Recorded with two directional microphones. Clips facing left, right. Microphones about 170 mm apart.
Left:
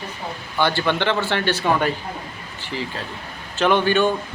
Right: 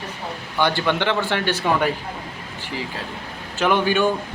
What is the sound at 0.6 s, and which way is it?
Speech, 15° right (ahead or behind).